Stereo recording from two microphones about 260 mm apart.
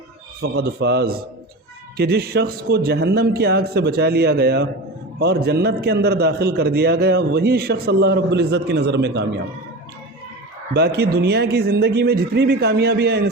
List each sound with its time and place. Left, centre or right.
0.4 s a man's voice: right
10.8 s a man's voice: right